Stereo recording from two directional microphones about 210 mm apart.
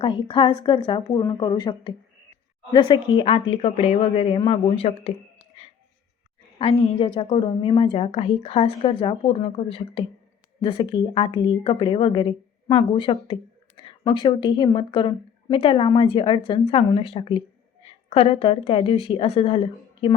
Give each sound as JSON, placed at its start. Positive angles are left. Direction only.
{"t": 0.0, "sound": "a woman's voice", "side_deg": 25}
{"t": 6.6, "sound": "a woman's voice", "side_deg": 30}